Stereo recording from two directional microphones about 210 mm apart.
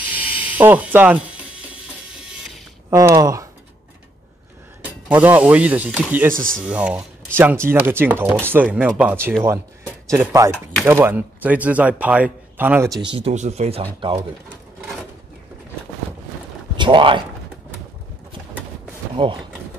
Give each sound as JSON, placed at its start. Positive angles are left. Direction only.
{"t": 0.1, "sound": "a sound", "side_deg": -10}
{"t": 2.9, "sound": "speech", "side_deg": -15}
{"t": 5.0, "sound": "speech", "side_deg": -10}
{"t": 6.3, "sound": "speech", "side_deg": -40}
{"t": 6.6, "sound": "speech", "side_deg": -5}
{"t": 13.0, "sound": "speech", "side_deg": -25}
{"t": 16.7, "sound": "speech", "side_deg": -25}
{"t": 19.2, "sound": "speech", "side_deg": -25}